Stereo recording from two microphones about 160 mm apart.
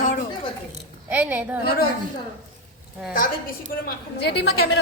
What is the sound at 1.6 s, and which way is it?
Speech, 75° left (ahead or behind).